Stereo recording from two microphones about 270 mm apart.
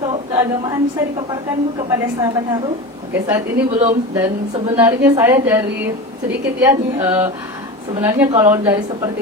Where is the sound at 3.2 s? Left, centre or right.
Centre.